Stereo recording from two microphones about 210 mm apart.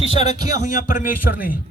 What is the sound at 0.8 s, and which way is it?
Speech, 40° left (ahead or behind).